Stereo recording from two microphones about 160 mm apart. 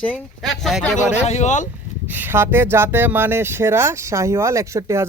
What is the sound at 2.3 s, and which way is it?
Speech, 15° right (ahead or behind).